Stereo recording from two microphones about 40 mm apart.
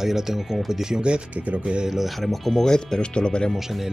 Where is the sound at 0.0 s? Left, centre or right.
Centre.